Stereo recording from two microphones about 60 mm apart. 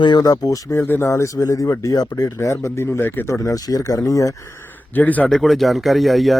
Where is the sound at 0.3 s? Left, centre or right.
Left.